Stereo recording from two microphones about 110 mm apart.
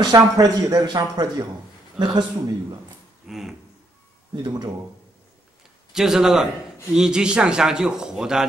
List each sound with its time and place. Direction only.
0.0 s speech: 35° right (ahead or behind)
3.3 s speech: 5° right (ahead or behind)
4.4 s speech: 40° right (ahead or behind)
5.9 s a man's voice: 5° right (ahead or behind)